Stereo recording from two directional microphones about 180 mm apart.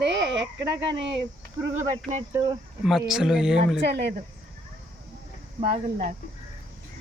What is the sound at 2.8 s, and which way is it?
Speech, centre (ahead or behind).